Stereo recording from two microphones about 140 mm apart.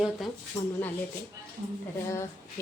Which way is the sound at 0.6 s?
25° left (ahead or behind).